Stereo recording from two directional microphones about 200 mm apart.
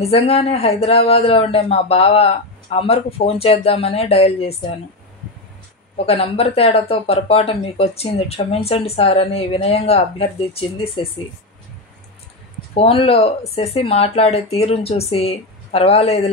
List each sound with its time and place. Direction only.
0.0 s speech: 30° left (ahead or behind)
6.0 s speech: 30° left (ahead or behind)
12.7 s speech: 30° left (ahead or behind)